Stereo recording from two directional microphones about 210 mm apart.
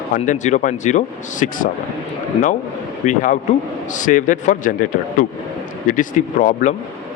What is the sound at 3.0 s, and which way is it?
A man's voice, 35° left (ahead or behind).